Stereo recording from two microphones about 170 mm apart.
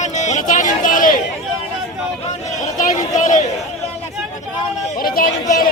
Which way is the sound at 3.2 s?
50° left (ahead or behind).